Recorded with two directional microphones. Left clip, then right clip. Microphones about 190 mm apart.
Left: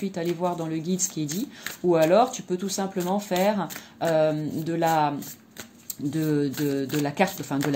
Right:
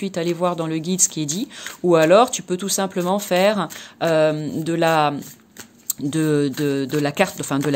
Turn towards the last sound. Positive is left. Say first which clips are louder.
# right 5 dB
turn(degrees=-40)  # may be behind; listen again after turning